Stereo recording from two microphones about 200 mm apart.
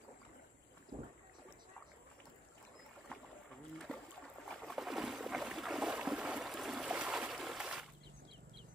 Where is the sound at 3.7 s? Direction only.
5° left (ahead or behind).